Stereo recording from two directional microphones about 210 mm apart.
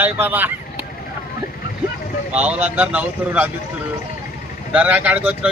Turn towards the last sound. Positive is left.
turn(degrees=-5)  # may be behind; listen again after turning